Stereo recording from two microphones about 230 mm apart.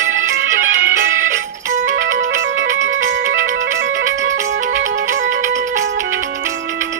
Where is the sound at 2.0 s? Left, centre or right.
Right.